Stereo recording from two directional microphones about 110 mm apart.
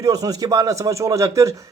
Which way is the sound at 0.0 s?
35° right (ahead or behind).